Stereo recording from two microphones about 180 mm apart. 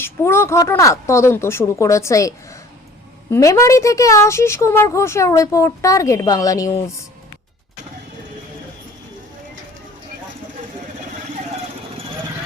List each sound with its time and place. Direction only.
0.0 s speech: 15° left (ahead or behind)